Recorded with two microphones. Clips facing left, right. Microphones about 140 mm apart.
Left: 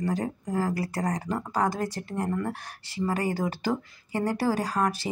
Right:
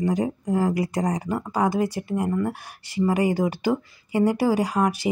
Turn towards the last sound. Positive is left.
turn(degrees=-15)  # may be behind; listen again after turning